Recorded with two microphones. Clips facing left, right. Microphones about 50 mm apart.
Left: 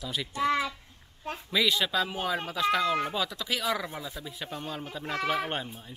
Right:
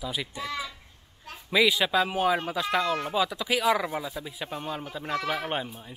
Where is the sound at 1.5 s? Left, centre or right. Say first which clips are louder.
Right 4 dB; centre.